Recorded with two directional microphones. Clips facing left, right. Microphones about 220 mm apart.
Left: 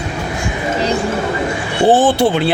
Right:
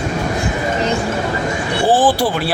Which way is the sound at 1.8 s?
25° left (ahead or behind).